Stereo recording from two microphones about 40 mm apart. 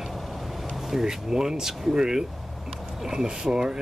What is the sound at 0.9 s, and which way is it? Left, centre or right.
Speech, centre.